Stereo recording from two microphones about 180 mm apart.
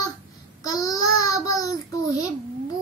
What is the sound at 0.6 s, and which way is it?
Child singing, 20° left (ahead or behind).